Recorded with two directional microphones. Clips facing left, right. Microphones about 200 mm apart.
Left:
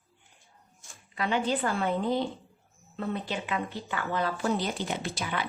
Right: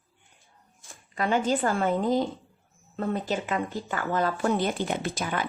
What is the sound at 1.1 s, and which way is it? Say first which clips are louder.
Speech: right 3 dB; 45° right (ahead or behind).